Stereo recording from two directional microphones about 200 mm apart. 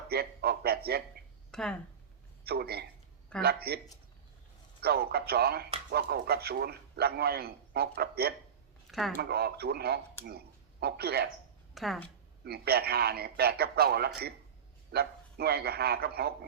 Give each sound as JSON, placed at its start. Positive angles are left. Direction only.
{"t": 0.1, "sound": "a man's voice", "side_deg": -50}
{"t": 1.5, "sound": "speech", "side_deg": 5}
{"t": 2.4, "sound": "a man's voice", "side_deg": -50}
{"t": 4.8, "sound": "a man's voice", "side_deg": -50}
{"t": 8.9, "sound": "speech", "side_deg": 0}
{"t": 9.3, "sound": "a man's voice", "side_deg": -50}
{"t": 11.7, "sound": "a woman's voice", "side_deg": 0}
{"t": 12.5, "sound": "a man's voice", "side_deg": -50}